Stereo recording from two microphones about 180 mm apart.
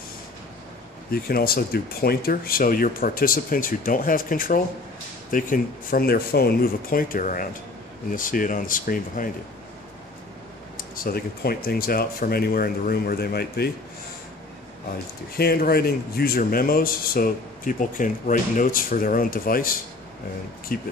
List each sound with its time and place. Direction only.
1.1 s a man's voice: 55° left (ahead or behind)
11.0 s speech: 55° left (ahead or behind)
15.3 s a man's voice: 55° left (ahead or behind)